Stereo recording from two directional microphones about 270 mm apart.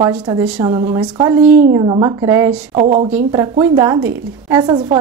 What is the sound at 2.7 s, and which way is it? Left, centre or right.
A woman's voice, right.